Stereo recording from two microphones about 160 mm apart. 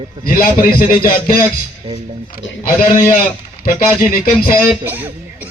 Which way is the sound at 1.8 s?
30° right (ahead or behind).